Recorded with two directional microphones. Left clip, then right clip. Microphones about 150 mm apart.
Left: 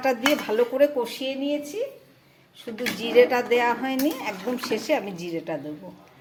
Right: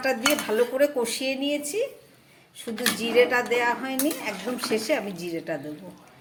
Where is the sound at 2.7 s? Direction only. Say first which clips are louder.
Left 2 dB; 5° left (ahead or behind).